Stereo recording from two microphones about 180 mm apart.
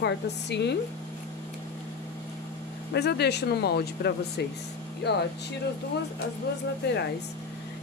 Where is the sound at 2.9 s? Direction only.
65° left (ahead or behind).